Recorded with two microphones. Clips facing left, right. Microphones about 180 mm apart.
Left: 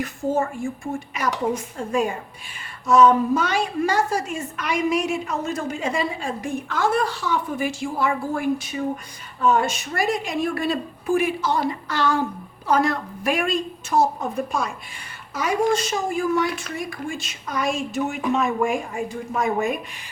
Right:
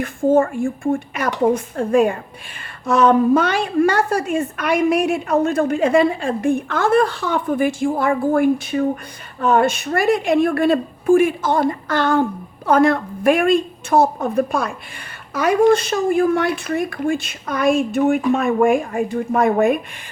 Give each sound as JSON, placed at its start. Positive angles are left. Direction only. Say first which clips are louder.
{"t": 0.0, "sound": "a woman's voice", "louder": "right 8 dB", "side_deg": -50}